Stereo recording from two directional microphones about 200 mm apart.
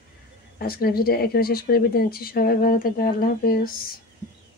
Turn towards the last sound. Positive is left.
turn(degrees=50)  # may be behind; listen again after turning